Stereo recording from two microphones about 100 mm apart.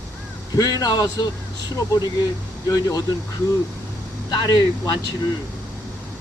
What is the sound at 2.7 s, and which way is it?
Speech, 40° left (ahead or behind).